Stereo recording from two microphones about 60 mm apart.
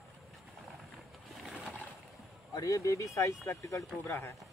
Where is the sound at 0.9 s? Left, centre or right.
Centre.